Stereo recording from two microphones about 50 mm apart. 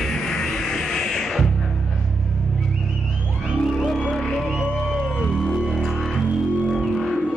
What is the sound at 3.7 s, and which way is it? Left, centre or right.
Music, centre.